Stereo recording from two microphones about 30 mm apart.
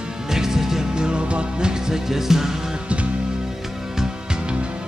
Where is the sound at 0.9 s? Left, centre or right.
Right.